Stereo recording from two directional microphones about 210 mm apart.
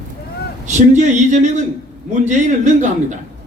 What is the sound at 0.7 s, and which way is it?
A man's voice, 35° right (ahead or behind).